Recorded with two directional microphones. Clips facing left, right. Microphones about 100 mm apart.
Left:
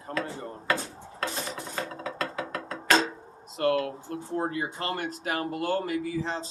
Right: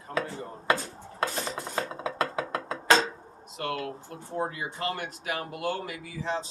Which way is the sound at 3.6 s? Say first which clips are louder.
Left 7 dB; 40° left (ahead or behind).